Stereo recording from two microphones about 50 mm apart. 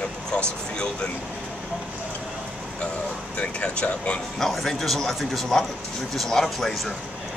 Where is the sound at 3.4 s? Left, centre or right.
Centre.